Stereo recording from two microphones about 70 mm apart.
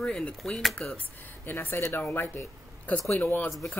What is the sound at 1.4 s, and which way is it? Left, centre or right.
Speech, left.